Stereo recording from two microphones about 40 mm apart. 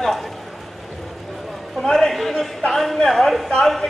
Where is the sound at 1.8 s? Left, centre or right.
Centre.